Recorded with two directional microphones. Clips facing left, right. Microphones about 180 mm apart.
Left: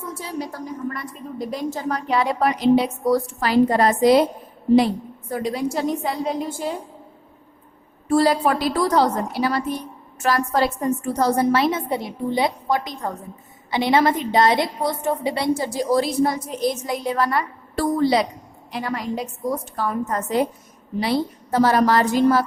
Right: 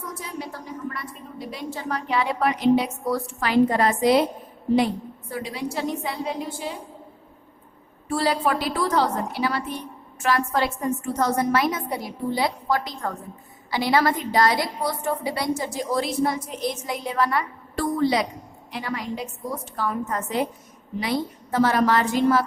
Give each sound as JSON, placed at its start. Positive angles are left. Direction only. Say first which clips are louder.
{"t": 0.1, "sound": "a sound", "louder": "left 6 dB", "side_deg": 30}
{"t": 0.9, "sound": "a woman's voice", "louder": "left 5 dB", "side_deg": 45}
{"t": 5.3, "sound": "a woman's voice", "louder": "left 6 dB", "side_deg": 45}
{"t": 8.1, "sound": "a woman's voice", "louder": "left 5 dB", "side_deg": 45}
{"t": 15.5, "sound": "a woman's voice", "louder": "left 5 dB", "side_deg": 35}
{"t": 18.7, "sound": "a woman's voice", "louder": "left 4 dB", "side_deg": 45}